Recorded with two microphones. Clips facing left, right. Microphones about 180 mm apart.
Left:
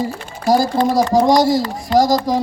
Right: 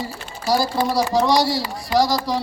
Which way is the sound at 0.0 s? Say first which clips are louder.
Left 7 dB; 50° left (ahead or behind).